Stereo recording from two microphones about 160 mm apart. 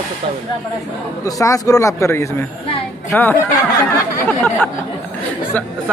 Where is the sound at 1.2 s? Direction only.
20° left (ahead or behind).